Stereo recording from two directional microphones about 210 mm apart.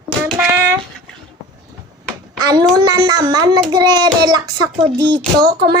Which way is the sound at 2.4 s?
20° right (ahead or behind).